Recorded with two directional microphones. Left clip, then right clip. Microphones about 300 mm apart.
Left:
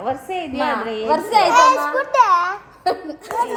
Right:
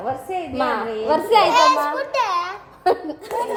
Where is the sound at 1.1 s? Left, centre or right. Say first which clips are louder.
Even; centre.